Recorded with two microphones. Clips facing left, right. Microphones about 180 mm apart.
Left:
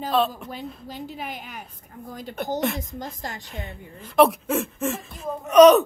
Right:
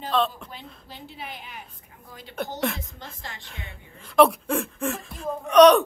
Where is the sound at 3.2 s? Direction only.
40° left (ahead or behind).